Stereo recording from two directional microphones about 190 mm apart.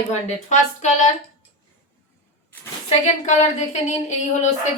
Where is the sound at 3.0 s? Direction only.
40° left (ahead or behind).